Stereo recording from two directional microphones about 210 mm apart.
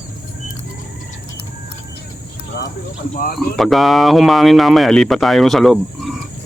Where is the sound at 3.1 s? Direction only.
40° left (ahead or behind).